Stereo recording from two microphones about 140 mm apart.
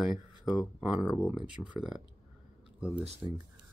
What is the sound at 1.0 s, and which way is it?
Speech, 25° left (ahead or behind).